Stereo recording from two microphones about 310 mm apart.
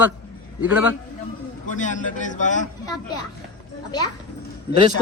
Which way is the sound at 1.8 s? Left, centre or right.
Left.